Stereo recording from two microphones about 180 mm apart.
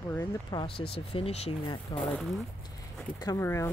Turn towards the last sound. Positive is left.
turn(degrees=15)  # may be behind; listen again after turning